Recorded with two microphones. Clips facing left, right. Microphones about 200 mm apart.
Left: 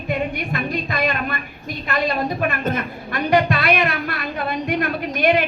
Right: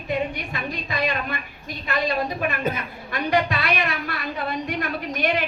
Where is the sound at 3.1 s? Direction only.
55° left (ahead or behind).